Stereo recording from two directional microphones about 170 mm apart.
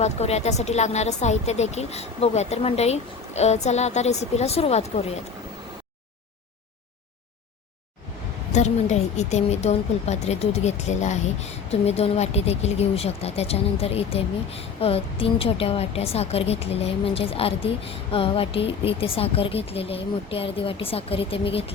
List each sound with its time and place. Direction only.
0.0 s a woman's voice: 40° left (ahead or behind)
8.5 s a woman's voice: 45° left (ahead or behind)